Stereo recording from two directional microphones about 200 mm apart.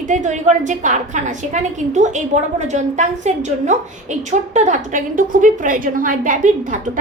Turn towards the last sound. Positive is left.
turn(degrees=-40)  # may be behind; listen again after turning